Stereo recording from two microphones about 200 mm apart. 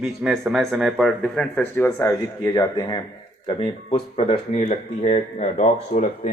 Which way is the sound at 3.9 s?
35° left (ahead or behind).